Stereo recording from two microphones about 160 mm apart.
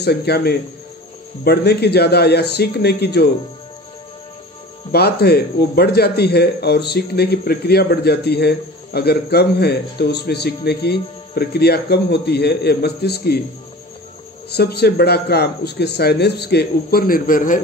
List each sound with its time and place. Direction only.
0.0 s speech: 90° left
4.9 s a man's voice: 80° left
14.5 s a man's voice: 90° left; by 17.6 s 60° left (ahead or behind)